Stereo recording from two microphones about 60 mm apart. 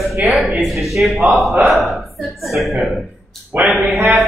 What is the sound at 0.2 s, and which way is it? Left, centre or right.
A man's voice, centre.